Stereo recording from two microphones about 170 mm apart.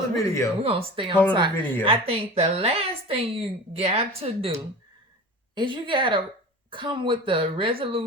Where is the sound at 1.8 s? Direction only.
35° right (ahead or behind).